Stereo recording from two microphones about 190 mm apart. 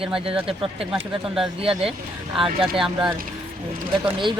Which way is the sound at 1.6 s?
30° right (ahead or behind).